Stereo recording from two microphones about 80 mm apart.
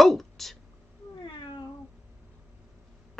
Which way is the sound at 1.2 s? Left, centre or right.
Left.